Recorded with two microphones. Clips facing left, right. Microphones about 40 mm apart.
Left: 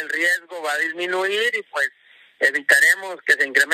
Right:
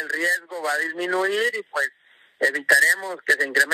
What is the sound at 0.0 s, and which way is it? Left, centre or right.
A man's voice, left.